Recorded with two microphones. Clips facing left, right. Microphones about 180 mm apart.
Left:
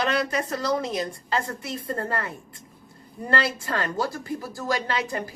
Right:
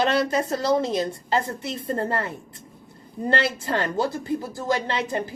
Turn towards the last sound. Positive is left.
turn(degrees=-25)  # may be behind; listen again after turning